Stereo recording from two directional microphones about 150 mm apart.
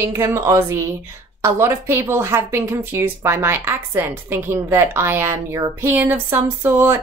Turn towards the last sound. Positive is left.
turn(degrees=-15)  # may be behind; listen again after turning